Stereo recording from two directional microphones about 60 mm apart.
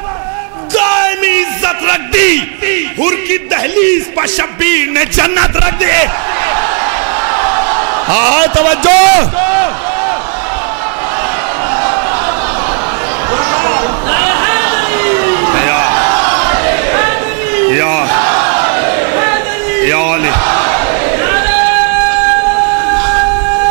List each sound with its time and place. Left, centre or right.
0.7 s a man's voice: right
7.4 s a man's voice: right
13.5 s a sound: right
17.6 s battle cry: right
21.3 s music: right
22.8 s siren: right